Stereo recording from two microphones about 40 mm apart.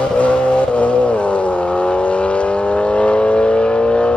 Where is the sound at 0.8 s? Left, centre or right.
Left.